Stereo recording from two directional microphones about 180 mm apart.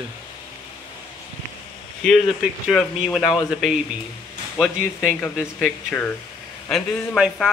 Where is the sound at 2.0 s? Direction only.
5° left (ahead or behind).